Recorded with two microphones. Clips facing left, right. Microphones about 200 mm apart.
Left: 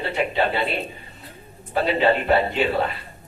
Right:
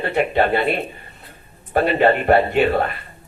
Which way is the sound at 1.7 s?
55° right (ahead or behind).